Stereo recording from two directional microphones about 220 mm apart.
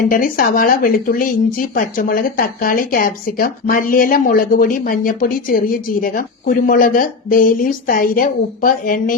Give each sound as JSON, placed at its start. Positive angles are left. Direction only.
{"t": 0.1, "sound": "speech", "side_deg": 40}